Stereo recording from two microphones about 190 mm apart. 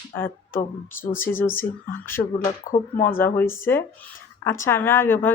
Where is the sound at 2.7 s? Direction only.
45° left (ahead or behind).